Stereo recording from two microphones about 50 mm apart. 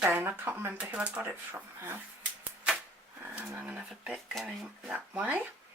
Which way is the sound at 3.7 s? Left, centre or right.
Centre.